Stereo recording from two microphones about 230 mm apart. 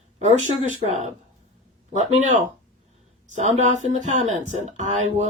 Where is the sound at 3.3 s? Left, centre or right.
Right.